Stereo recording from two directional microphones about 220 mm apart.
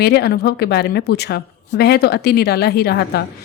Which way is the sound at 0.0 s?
45° left (ahead or behind).